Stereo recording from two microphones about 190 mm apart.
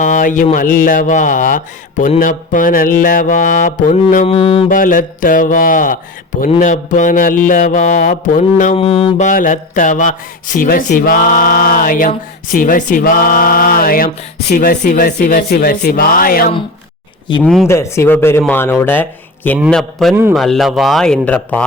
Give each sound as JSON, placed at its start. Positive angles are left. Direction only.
{"t": 0.0, "sound": "mantra", "side_deg": 40}
{"t": 4.3, "sound": "a sound", "side_deg": 30}
{"t": 4.7, "sound": "mantra", "side_deg": 45}
{"t": 17.4, "sound": "a man's voice", "side_deg": 0}
{"t": 17.7, "sound": "speech", "side_deg": 15}
{"t": 19.5, "sound": "a man's voice", "side_deg": 0}